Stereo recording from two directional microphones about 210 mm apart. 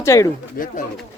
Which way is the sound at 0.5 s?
40° left (ahead or behind).